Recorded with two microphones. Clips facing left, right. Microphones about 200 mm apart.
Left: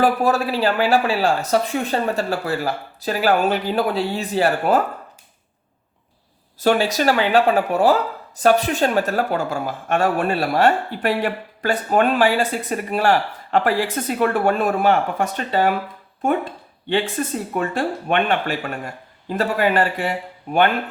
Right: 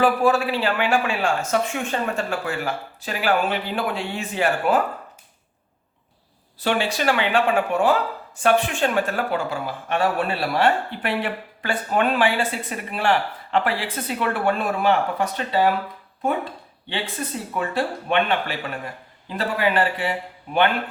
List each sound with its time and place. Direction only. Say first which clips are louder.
0.0 s speech: left 1 dB; 40° left (ahead or behind)
6.6 s speech: left 5 dB; 40° left (ahead or behind)
16.9 s speech: left 7 dB; 45° left (ahead or behind)